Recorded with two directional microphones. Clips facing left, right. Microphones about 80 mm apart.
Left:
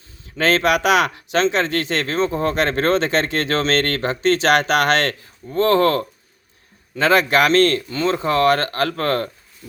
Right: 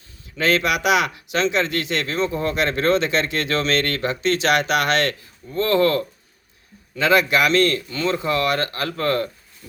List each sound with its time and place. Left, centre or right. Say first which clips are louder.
0.3 s speech: left 3 dB; left